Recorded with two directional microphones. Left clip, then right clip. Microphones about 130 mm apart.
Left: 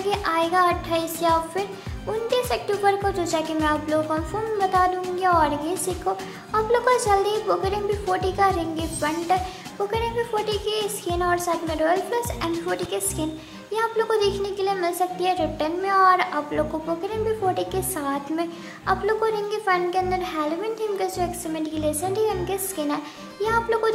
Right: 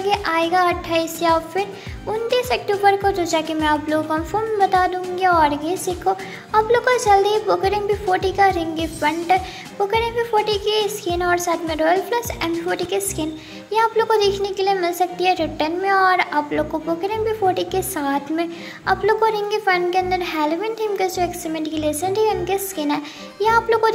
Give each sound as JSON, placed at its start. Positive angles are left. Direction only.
{"t": 0.1, "sound": "music", "side_deg": -15}
{"t": 2.8, "sound": "speech", "side_deg": -20}